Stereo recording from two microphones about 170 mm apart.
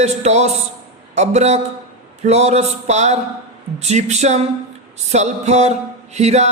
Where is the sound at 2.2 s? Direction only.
40° right (ahead or behind).